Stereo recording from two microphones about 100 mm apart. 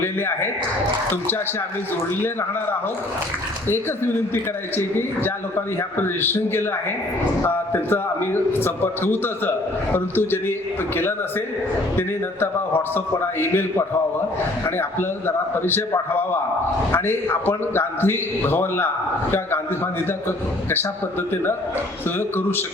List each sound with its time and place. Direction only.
0.0 s a man's voice: 25° left (ahead or behind)
4.8 s a man's voice: 25° left (ahead or behind)
16.9 s a man's voice: 20° left (ahead or behind)
22.2 s a man's voice: 20° left (ahead or behind)